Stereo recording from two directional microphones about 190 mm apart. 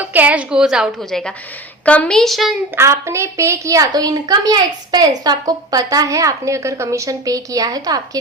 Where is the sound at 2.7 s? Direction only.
15° right (ahead or behind).